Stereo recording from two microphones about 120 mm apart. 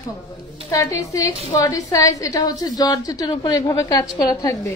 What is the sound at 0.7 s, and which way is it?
A woman's voice, 30° left (ahead or behind).